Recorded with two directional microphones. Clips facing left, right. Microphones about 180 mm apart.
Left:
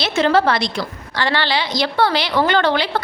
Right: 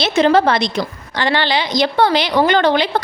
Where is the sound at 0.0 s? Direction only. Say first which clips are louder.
Right 3 dB; 20° right (ahead or behind).